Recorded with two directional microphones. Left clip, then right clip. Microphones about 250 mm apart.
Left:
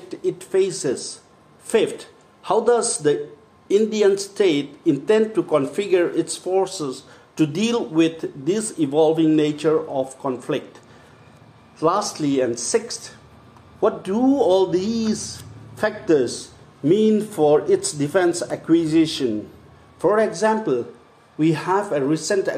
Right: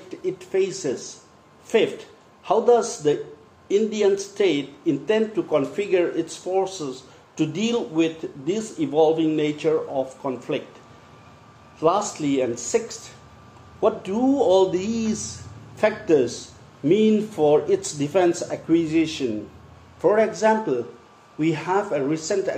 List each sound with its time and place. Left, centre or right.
0.1 s a man's voice: centre
11.8 s speech: centre